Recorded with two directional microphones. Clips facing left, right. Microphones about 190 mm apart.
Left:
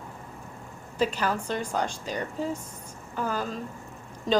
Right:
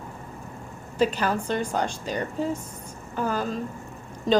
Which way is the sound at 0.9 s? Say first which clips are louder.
Right 3 dB; 60° right (ahead or behind).